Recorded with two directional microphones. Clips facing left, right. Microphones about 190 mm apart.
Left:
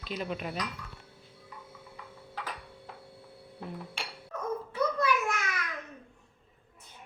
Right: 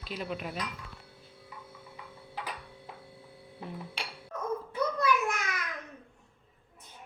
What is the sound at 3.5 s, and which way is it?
Dishes, centre (ahead or behind).